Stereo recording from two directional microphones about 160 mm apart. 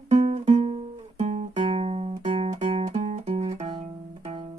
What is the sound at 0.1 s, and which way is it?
Music, 45° right (ahead or behind).